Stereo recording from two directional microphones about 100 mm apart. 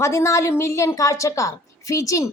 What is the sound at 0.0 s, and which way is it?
A woman's voice, 30° left (ahead or behind).